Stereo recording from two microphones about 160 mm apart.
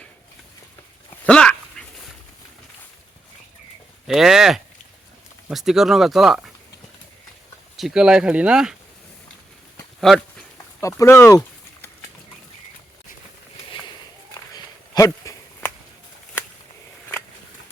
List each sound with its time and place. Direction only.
1.2 s speech: 5° left (ahead or behind)
1.8 s fowl: 5° left (ahead or behind)
4.0 s speech: centre (ahead or behind)
7.8 s speech: 5° right (ahead or behind)
10.0 s speech: 5° left (ahead or behind)
10.8 s speech: 20° left (ahead or behind)
14.5 s a sound: 20° left (ahead or behind)